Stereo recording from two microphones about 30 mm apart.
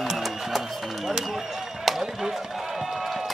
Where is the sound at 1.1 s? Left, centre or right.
Centre.